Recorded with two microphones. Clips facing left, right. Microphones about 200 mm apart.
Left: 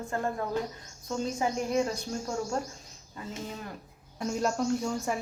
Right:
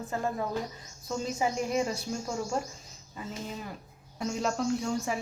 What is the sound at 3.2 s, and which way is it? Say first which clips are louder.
Speech: right 1 dB; 5° right (ahead or behind).